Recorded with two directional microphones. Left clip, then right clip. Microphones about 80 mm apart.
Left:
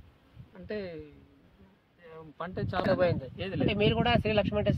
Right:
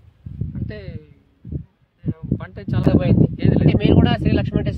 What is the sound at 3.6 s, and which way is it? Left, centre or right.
Speech, left.